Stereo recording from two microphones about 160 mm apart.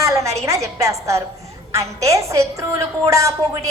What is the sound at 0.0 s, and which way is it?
Music, 20° right (ahead or behind).